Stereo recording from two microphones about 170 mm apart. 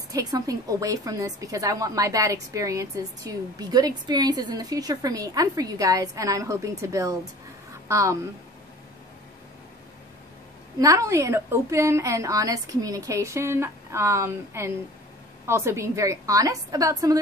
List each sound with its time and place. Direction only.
0.1 s a woman's voice: 20° right (ahead or behind)
10.8 s a woman's voice: 20° right (ahead or behind)